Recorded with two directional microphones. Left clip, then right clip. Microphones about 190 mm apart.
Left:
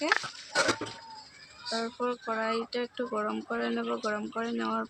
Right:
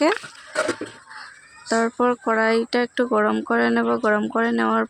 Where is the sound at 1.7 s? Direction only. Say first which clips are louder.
Right 12 dB; 50° right (ahead or behind).